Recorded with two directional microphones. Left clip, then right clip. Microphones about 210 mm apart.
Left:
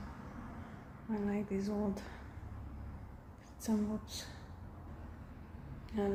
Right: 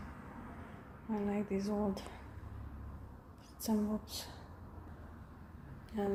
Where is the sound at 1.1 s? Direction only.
20° right (ahead or behind).